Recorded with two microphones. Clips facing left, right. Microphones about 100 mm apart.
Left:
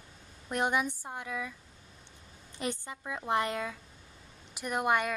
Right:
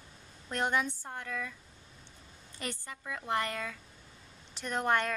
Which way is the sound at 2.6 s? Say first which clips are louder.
Left 5 dB; 20° left (ahead or behind).